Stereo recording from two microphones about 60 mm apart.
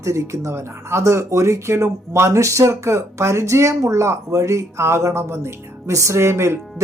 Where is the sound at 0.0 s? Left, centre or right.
Right.